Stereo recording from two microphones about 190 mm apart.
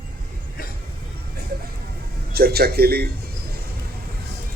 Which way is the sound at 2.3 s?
55° right (ahead or behind).